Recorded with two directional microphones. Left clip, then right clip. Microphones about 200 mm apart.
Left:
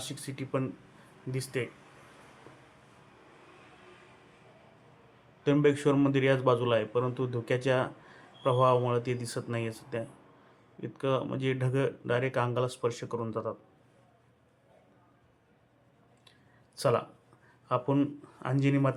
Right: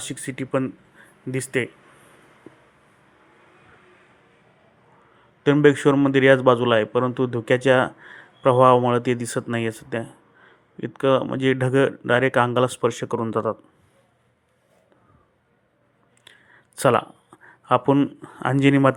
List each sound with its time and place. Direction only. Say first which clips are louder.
0.1 s a man's voice: right 11 dB; 35° right (ahead or behind)
5.4 s a man's voice: right 9 dB; 30° right (ahead or behind)
16.7 s a man's voice: right 9 dB; 40° right (ahead or behind)